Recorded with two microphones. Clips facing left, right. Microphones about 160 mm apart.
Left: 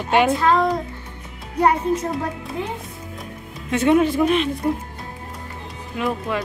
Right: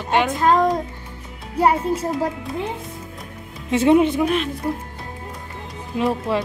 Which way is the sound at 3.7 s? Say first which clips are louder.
Right 2 dB; 25° right (ahead or behind).